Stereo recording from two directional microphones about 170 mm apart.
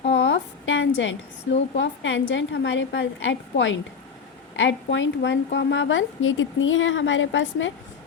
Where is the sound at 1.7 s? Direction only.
90° left.